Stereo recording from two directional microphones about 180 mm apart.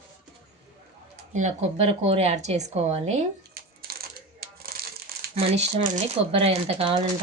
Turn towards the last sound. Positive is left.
turn(degrees=-35)  # may be behind; listen again after turning